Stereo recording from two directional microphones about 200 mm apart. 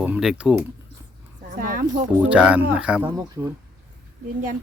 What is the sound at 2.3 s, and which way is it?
Speech, 5° right (ahead or behind).